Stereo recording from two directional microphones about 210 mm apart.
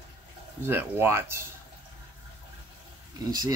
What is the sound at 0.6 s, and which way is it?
Speech, 10° right (ahead or behind).